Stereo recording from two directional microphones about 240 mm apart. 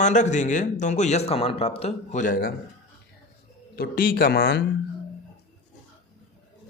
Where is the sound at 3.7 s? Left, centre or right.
Left.